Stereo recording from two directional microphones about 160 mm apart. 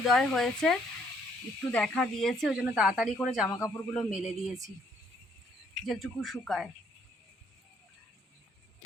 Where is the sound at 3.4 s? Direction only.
20° left (ahead or behind).